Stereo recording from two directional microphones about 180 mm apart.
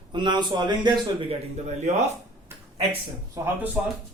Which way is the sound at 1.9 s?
40° right (ahead or behind).